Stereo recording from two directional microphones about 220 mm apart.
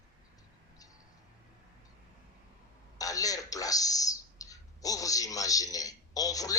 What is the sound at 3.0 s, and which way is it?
A man's voice, 15° left (ahead or behind).